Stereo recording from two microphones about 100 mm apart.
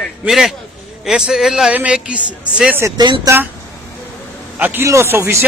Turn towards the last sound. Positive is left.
turn(degrees=-25)  # may be behind; listen again after turning